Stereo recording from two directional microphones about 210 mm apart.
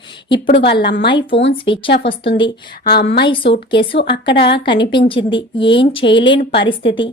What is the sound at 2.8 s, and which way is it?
Speech, 50° left (ahead or behind).